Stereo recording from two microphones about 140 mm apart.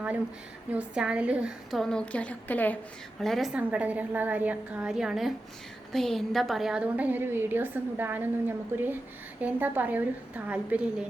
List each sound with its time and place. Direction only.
0.7 s a woman's voice: 10° right (ahead or behind); by 2.7 s 10° left (ahead or behind)
3.2 s a woman's voice: centre (ahead or behind)
3.6 s a woman's voice: 10° right (ahead or behind)